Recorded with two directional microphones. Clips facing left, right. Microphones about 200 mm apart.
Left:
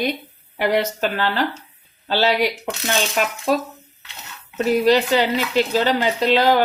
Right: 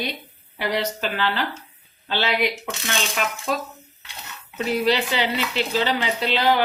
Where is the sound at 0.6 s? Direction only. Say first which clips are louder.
Left 5 dB; 50° left (ahead or behind).